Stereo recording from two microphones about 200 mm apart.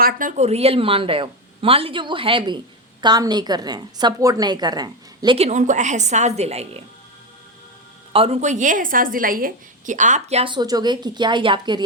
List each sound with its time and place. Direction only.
0.0 s a woman's voice: 40° right (ahead or behind)
8.1 s a woman's voice: 30° right (ahead or behind)